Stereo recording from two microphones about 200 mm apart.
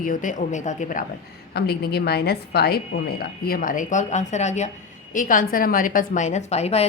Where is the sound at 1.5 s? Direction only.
55° left (ahead or behind).